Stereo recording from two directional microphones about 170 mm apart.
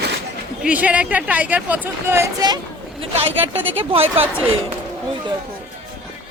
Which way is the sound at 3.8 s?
30° right (ahead or behind).